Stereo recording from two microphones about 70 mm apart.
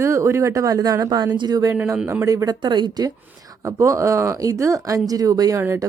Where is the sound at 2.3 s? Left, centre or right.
Right.